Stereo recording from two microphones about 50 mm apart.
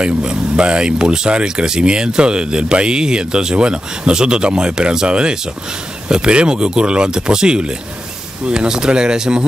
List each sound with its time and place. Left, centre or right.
0.0 s speech: centre